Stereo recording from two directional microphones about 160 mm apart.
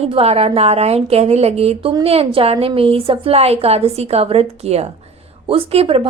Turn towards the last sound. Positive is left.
turn(degrees=-40)  # may be behind; listen again after turning